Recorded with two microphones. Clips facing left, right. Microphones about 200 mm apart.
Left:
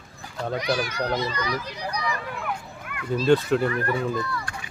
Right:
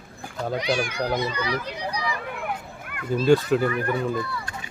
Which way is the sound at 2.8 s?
50° right (ahead or behind).